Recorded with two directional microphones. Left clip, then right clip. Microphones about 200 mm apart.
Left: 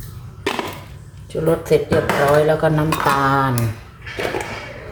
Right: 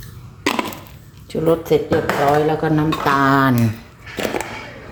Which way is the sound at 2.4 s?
15° right (ahead or behind).